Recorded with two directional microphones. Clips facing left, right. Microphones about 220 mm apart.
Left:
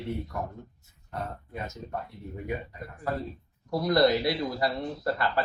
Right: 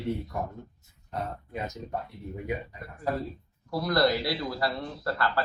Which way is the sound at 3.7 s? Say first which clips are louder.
Left 2 dB; 20° left (ahead or behind).